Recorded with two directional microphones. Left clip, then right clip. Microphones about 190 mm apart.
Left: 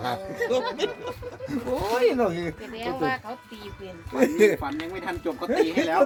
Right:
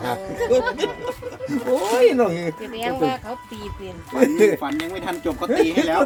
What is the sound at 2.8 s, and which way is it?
Speech, 55° right (ahead or behind).